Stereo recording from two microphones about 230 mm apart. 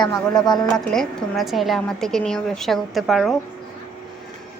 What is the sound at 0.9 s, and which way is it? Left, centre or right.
A woman's voice, centre.